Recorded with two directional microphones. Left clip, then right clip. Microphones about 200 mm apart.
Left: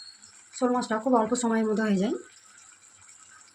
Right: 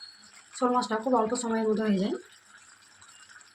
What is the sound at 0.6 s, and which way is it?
Speech, 15° left (ahead or behind).